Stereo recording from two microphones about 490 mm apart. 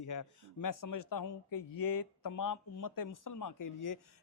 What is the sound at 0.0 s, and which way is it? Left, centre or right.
Speech, left.